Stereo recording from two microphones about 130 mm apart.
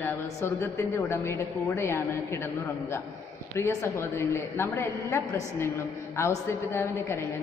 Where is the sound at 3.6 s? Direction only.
20° left (ahead or behind).